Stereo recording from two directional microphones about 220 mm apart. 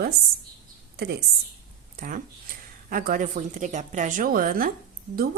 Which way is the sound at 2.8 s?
40° right (ahead or behind).